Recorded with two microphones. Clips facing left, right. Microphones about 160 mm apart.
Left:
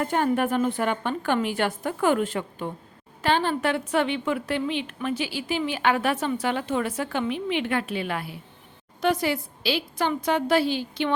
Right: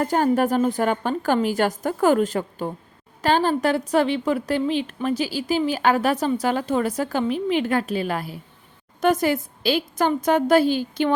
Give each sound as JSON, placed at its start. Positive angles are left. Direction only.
{"t": 0.0, "sound": "a woman's voice", "side_deg": -40}